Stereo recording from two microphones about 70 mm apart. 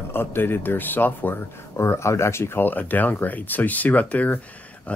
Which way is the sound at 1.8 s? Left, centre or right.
Left.